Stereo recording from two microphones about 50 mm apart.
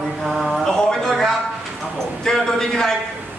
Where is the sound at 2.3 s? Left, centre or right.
Centre.